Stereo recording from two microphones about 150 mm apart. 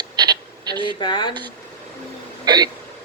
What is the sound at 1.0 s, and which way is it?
Speech, 30° left (ahead or behind).